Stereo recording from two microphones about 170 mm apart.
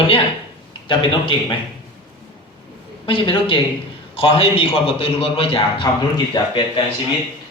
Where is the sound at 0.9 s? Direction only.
30° left (ahead or behind).